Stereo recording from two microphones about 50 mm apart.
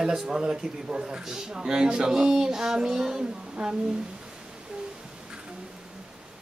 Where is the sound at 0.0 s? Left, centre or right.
Centre.